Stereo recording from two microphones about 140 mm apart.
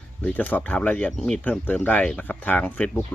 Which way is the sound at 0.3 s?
10° left (ahead or behind).